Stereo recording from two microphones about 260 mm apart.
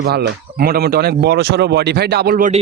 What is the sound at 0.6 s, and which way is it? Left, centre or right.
A man's voice, right.